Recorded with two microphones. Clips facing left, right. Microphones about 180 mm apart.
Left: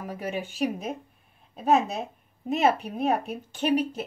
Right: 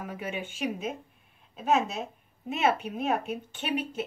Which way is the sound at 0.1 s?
35° left (ahead or behind).